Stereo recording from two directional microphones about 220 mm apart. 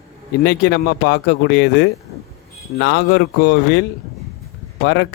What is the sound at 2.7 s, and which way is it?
Speech, 50° left (ahead or behind).